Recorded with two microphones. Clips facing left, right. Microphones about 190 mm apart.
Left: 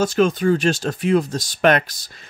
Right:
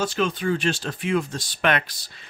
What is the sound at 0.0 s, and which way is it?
Speech, 45° left (ahead or behind).